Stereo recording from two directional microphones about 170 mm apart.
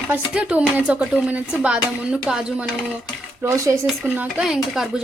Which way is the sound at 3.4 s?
15° right (ahead or behind).